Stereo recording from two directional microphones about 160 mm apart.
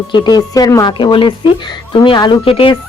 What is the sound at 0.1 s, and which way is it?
A woman's voice, 25° left (ahead or behind).